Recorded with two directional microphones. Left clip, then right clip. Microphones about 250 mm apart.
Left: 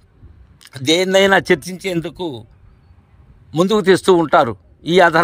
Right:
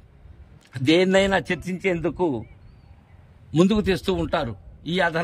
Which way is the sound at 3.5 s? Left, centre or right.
Centre.